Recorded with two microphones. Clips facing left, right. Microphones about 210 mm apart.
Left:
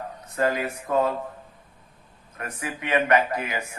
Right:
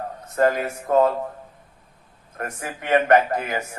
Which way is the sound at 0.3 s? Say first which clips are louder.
Right 4 dB; 50° right (ahead or behind).